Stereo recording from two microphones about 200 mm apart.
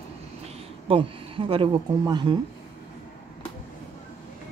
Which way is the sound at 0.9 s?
25° right (ahead or behind).